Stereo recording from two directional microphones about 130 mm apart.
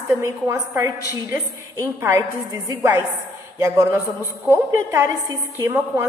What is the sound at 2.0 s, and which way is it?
Speech, 20° right (ahead or behind).